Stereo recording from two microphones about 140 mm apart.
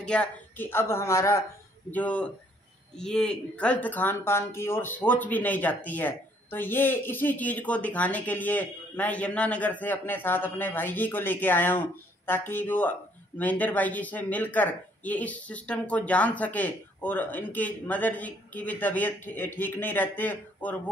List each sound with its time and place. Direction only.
0.0 s speech: 10° left (ahead or behind)
1.9 s speech: 10° left (ahead or behind)